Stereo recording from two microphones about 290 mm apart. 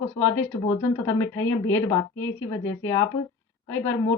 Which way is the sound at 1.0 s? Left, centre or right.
Centre.